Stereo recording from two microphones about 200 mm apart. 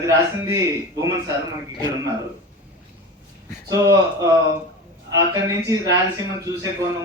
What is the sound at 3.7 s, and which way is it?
A man's voice, 15° right (ahead or behind).